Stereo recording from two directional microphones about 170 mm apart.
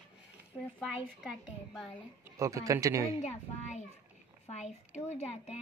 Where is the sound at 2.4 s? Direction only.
20° right (ahead or behind).